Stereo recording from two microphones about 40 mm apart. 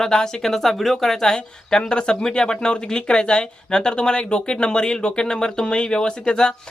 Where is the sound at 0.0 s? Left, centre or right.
Centre.